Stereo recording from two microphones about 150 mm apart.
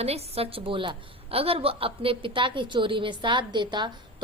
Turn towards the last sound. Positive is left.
turn(degrees=-30)  # may be behind; listen again after turning